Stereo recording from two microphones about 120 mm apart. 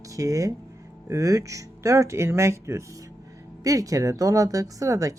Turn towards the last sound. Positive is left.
turn(degrees=-30)  # may be behind; listen again after turning